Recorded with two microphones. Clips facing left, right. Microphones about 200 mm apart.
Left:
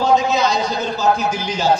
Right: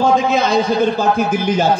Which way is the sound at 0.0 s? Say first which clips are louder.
Right 2 dB; 55° right (ahead or behind).